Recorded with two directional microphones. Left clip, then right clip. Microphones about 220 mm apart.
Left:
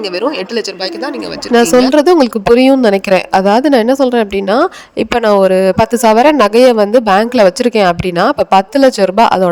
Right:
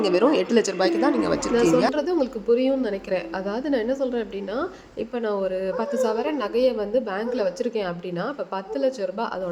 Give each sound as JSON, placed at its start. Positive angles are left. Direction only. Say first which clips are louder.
{"t": 0.2, "sound": "speech", "louder": "left 5 dB", "side_deg": 30}
{"t": 1.5, "sound": "speech", "louder": "left 14 dB", "side_deg": 50}